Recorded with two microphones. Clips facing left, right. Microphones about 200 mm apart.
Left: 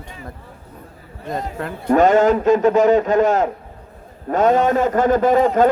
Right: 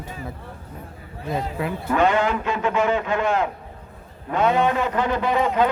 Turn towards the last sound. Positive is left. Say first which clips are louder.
# left 6 dB
turn(degrees=45)  # may be behind; listen again after turning